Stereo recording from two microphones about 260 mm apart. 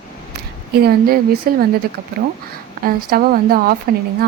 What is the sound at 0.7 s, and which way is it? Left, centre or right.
Speech, right.